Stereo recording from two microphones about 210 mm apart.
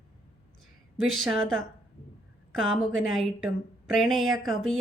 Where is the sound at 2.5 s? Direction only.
70° right (ahead or behind).